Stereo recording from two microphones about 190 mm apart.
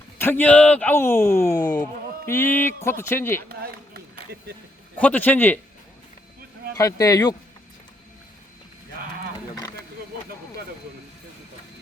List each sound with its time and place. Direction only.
0.2 s speech: 10° left (ahead or behind)
4.1 s a sound: 60° right (ahead or behind)
4.9 s speech: 10° left (ahead or behind)
6.7 s speech: 15° left (ahead or behind)